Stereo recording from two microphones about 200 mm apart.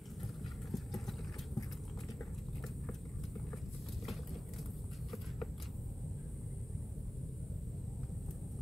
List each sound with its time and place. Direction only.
0.7 s clip-clop: centre (ahead or behind)